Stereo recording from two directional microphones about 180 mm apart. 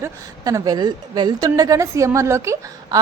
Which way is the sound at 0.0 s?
20° right (ahead or behind).